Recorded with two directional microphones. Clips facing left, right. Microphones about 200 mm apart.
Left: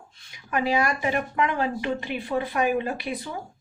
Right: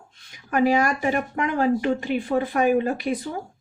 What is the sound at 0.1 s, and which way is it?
Speech, 45° right (ahead or behind).